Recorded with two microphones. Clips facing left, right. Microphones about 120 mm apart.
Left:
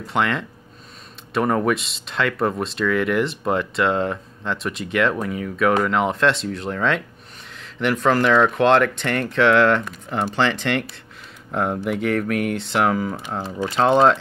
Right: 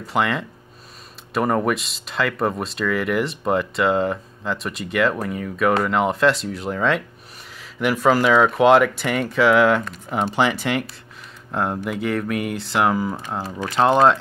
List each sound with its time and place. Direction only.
0.0 s speech: centre (ahead or behind)